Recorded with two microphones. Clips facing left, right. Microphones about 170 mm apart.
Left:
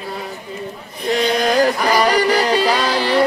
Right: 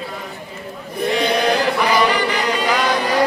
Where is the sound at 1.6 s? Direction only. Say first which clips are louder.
Left 1 dB; 45° left (ahead or behind).